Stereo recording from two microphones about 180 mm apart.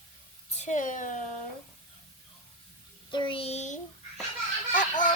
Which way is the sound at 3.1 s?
25° left (ahead or behind).